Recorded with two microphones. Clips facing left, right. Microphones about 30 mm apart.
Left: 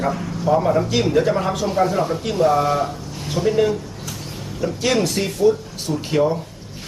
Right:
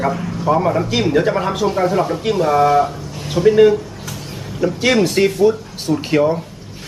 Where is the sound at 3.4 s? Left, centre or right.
Right.